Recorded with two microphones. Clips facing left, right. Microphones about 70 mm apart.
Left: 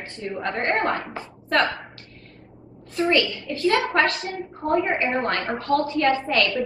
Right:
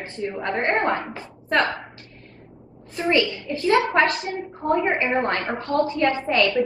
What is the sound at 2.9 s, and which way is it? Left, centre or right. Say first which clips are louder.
A woman's voice: even; right.